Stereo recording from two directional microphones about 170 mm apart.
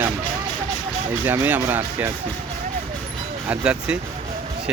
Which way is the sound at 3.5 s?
5° right (ahead or behind).